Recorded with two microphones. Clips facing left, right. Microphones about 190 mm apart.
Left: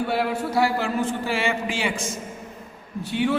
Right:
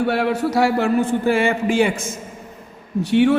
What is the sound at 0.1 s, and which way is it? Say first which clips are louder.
A man's voice: right 5 dB; 70° right (ahead or behind).